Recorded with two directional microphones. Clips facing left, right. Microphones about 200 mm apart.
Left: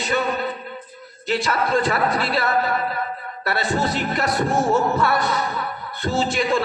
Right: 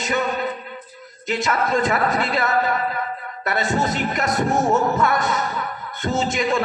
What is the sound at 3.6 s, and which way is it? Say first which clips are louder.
A man's voice: right 1 dB; 35° left (ahead or behind).